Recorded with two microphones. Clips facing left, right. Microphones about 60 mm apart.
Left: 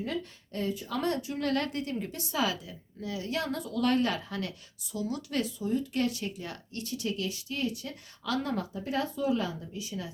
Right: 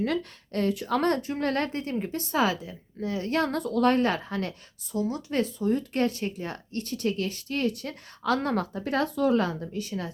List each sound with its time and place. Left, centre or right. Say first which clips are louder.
0.0 s a woman's voice: right 6 dB; right